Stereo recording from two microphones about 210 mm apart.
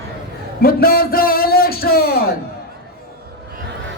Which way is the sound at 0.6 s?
45° left (ahead or behind).